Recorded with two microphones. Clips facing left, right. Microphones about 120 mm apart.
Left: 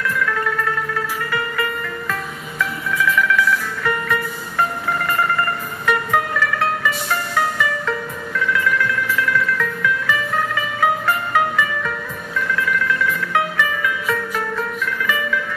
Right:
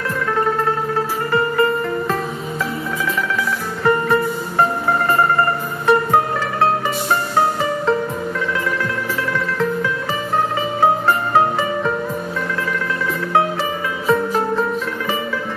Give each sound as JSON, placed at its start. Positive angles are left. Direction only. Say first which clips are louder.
{"t": 0.2, "sound": "music", "louder": "right 7 dB", "side_deg": -30}